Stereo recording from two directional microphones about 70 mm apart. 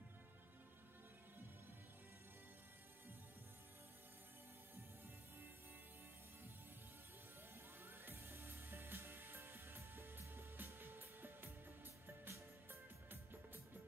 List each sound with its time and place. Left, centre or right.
7.8 s music: right